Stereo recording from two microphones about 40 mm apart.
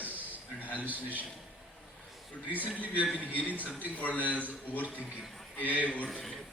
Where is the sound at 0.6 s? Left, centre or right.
Right.